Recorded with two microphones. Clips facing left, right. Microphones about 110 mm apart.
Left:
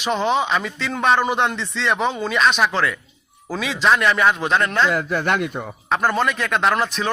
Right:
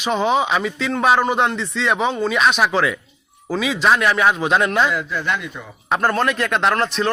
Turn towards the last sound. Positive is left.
turn(degrees=0)  # may be behind; listen again after turning